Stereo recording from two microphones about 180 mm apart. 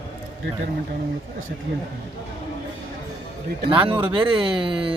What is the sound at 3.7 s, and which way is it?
Speech, 30° right (ahead or behind).